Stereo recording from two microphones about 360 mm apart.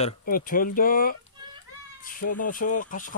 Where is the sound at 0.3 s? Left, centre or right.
Left.